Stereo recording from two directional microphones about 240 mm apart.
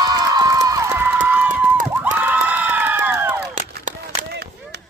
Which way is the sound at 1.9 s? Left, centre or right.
Centre.